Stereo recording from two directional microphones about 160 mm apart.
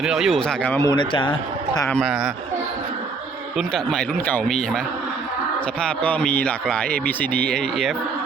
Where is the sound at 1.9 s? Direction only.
Centre (ahead or behind).